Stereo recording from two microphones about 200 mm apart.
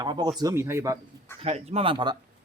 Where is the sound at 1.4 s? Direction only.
30° right (ahead or behind).